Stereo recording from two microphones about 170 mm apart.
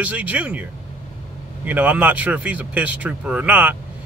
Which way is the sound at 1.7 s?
10° right (ahead or behind).